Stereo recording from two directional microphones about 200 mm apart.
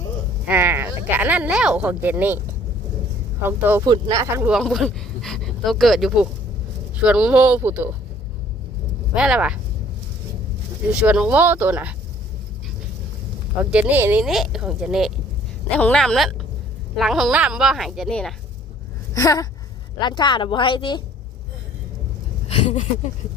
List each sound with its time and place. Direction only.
0.4 s speech: 10° right (ahead or behind)
3.4 s speech: 10° right (ahead or behind)
4.5 s speech: centre (ahead or behind)
9.1 s speech: 5° right (ahead or behind)
10.9 s speech: 5° right (ahead or behind)
13.6 s speech: 5° right (ahead or behind)
19.1 s speech: 15° left (ahead or behind)
22.4 s speech: 35° left (ahead or behind)